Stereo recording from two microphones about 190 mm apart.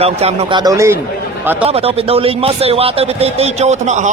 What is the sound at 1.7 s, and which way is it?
A man's voice, 30° right (ahead or behind).